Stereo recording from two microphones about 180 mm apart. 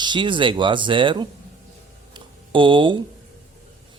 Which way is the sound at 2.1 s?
30° right (ahead or behind).